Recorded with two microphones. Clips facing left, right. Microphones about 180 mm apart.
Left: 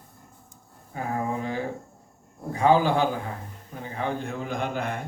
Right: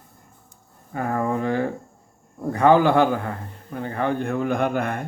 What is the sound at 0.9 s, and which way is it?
Speech, 60° right (ahead or behind).